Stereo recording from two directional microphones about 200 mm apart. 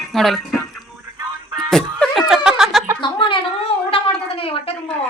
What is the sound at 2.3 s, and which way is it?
Snicker, 5° right (ahead or behind).